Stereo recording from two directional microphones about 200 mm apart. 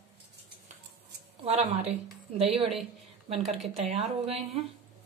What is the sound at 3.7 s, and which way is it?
Speech, 30° right (ahead or behind).